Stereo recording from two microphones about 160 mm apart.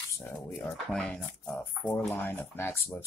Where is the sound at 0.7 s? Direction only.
5° left (ahead or behind).